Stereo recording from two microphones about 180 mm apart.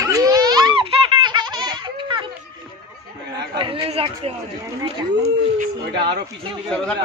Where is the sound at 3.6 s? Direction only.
30° right (ahead or behind).